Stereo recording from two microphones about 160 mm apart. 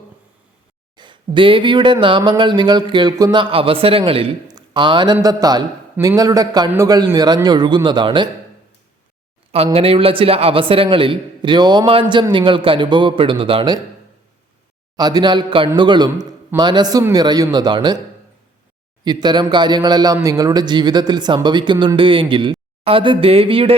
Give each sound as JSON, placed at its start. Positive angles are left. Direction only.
{"t": 0.9, "sound": "a man's voice", "side_deg": -30}
{"t": 4.4, "sound": "a sound", "side_deg": -25}
{"t": 5.2, "sound": "speech", "side_deg": -25}
{"t": 9.7, "sound": "a man's voice", "side_deg": -35}
{"t": 14.9, "sound": "speech", "side_deg": -25}
{"t": 19.0, "sound": "speech", "side_deg": -25}